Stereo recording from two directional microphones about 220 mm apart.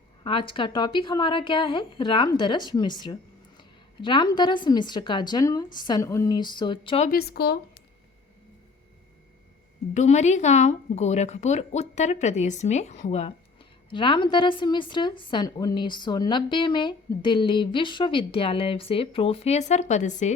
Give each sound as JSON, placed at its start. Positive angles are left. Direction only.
{"t": 0.3, "sound": "speech", "side_deg": 25}
{"t": 3.6, "sound": "a sound", "side_deg": 20}
{"t": 4.4, "sound": "speech", "side_deg": 20}
{"t": 7.1, "sound": "speech", "side_deg": 45}
{"t": 9.9, "sound": "speech", "side_deg": 30}